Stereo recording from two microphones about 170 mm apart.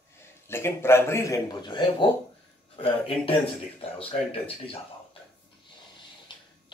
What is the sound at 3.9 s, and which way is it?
Speech, 35° left (ahead or behind).